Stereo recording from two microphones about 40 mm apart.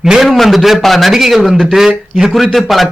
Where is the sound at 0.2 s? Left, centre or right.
Centre.